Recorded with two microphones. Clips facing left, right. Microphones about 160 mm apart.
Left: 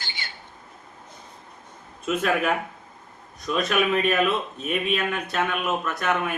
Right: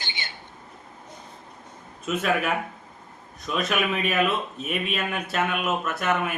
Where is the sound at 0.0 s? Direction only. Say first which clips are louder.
Right 1 dB; 20° right (ahead or behind).